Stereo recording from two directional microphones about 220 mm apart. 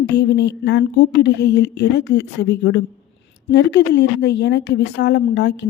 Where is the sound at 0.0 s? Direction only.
50° left (ahead or behind).